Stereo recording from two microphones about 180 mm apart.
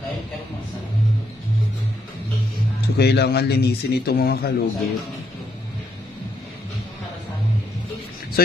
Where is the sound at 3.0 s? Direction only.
65° left (ahead or behind).